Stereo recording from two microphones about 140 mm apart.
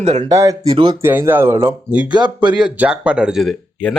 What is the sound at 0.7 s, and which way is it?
Speech, 35° right (ahead or behind).